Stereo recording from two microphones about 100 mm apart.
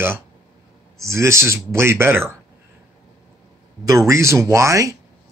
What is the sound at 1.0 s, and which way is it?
Speech, 25° right (ahead or behind).